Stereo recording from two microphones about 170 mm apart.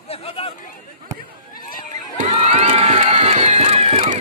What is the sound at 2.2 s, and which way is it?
Music, 40° right (ahead or behind).